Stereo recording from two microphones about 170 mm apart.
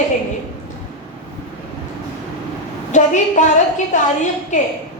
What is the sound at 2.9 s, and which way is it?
A woman's voice, 45° left (ahead or behind).